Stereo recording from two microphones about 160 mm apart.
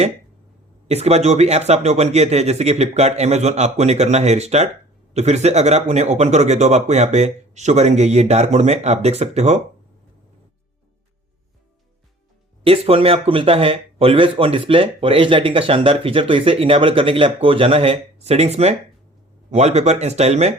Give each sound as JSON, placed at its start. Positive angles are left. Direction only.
{"t": 0.9, "sound": "speech", "side_deg": -40}
{"t": 12.6, "sound": "speech", "side_deg": -35}